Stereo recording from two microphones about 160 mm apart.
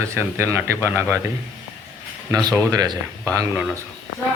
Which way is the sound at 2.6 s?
25° right (ahead or behind).